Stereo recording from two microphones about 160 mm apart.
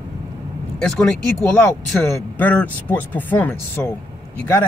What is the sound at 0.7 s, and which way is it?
Speech, 5° left (ahead or behind).